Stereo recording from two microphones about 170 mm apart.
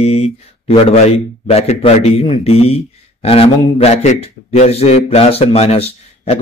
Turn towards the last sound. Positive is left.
turn(degrees=35)  # may be behind; listen again after turning